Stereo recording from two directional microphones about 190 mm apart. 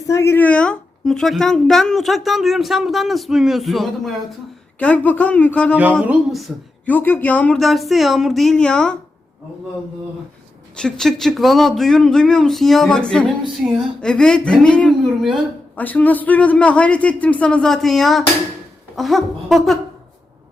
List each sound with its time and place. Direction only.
0.1 s speech: 15° left (ahead or behind)
6.5 s speech: 5° right (ahead or behind)
6.8 s speech: 10° left (ahead or behind)
10.8 s speech: 5° left (ahead or behind)